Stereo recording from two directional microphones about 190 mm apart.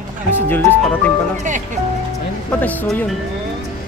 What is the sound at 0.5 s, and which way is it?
Speech, 10° left (ahead or behind).